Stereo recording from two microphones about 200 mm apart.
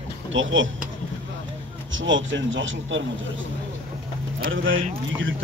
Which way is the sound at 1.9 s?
70° right (ahead or behind).